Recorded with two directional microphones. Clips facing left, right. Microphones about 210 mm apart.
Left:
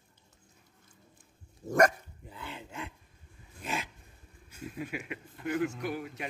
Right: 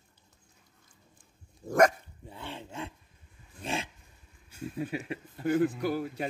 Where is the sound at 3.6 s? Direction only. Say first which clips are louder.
Right 2 dB; 30° right (ahead or behind).